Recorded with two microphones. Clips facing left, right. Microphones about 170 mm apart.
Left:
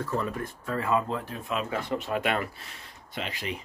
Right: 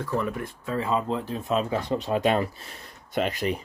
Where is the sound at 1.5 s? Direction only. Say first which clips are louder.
Right 4 dB; 35° right (ahead or behind).